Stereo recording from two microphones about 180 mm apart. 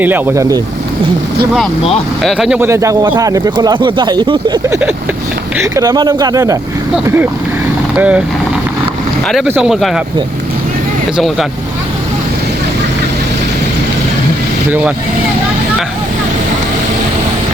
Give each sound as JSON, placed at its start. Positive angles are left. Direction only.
{"t": 0.0, "sound": "speech", "side_deg": -10}
{"t": 2.2, "sound": "speech", "side_deg": 0}
{"t": 2.6, "sound": "speech", "side_deg": -15}
{"t": 9.5, "sound": "speech", "side_deg": -5}